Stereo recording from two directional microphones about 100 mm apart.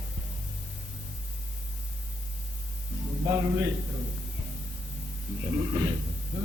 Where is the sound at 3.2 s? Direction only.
40° right (ahead or behind).